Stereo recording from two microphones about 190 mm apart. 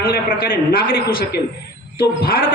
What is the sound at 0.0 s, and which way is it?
A man's voice, 50° left (ahead or behind).